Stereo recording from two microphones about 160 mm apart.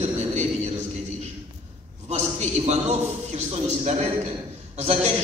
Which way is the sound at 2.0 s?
45° right (ahead or behind).